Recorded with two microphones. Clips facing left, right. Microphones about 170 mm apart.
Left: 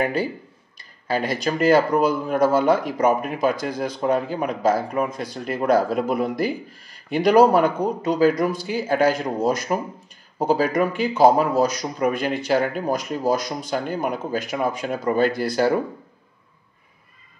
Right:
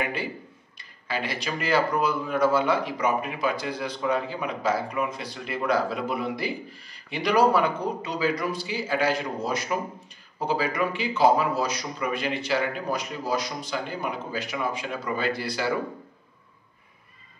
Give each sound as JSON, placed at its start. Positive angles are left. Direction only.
{"t": 0.0, "sound": "speech", "side_deg": 40}